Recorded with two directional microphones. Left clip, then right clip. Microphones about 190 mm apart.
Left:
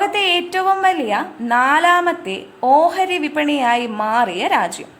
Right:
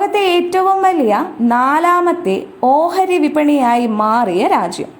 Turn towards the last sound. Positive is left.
turn(degrees=-10)  # may be behind; listen again after turning